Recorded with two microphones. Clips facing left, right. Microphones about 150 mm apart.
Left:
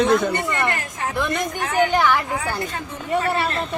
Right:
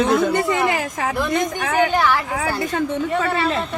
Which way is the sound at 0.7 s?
90° right.